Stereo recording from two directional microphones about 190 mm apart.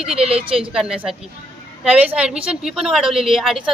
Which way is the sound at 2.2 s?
5° right (ahead or behind).